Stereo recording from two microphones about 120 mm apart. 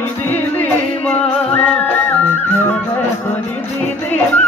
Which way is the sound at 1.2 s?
10° left (ahead or behind).